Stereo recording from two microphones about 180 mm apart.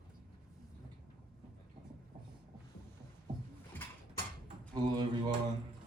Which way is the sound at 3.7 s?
10° left (ahead or behind).